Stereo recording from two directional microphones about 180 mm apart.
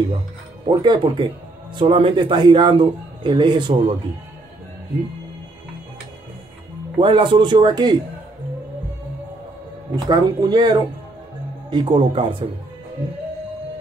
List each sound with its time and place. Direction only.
0.7 s a man's voice: 25° right (ahead or behind)
7.0 s a man's voice: 25° right (ahead or behind)
10.0 s a man's voice: 25° right (ahead or behind)